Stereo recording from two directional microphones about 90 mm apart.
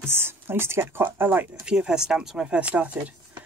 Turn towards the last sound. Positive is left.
turn(degrees=-15)  # may be behind; listen again after turning